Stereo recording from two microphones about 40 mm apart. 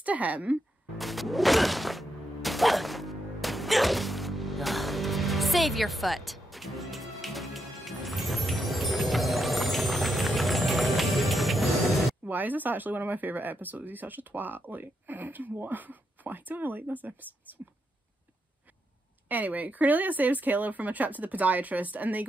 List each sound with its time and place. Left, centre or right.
0.0 s speech: right
0.9 s music: centre
12.3 s speech: right
19.2 s speech: right